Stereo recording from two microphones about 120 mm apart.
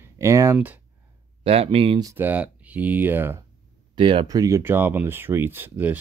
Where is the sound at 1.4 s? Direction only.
55° right (ahead or behind).